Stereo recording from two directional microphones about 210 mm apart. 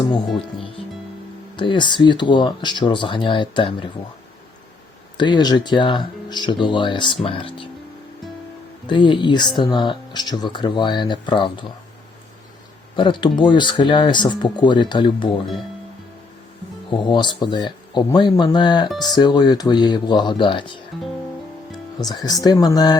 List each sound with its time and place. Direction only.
0.6 s speech: 25° left (ahead or behind)
5.1 s speech: 20° left (ahead or behind)
8.9 s speech: 20° left (ahead or behind)
13.0 s speech: 25° left (ahead or behind)
16.9 s speech: 20° left (ahead or behind)
21.9 s speech: 20° left (ahead or behind)